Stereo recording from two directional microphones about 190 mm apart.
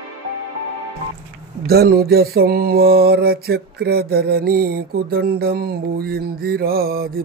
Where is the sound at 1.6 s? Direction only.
55° right (ahead or behind).